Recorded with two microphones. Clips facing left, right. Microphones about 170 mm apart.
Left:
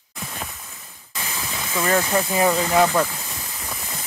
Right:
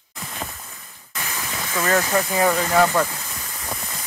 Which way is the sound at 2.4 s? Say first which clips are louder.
Even; 15° left (ahead or behind).